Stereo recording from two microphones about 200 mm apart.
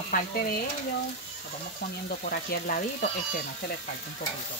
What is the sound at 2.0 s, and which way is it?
Speech, 50° left (ahead or behind).